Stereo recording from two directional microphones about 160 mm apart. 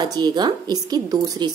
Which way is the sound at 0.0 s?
25° right (ahead or behind).